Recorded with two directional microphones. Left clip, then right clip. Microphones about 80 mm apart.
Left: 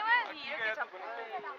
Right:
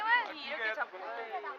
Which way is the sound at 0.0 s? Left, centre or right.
Left.